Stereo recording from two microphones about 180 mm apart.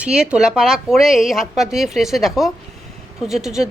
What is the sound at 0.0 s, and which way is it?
A woman's voice, 5° right (ahead or behind).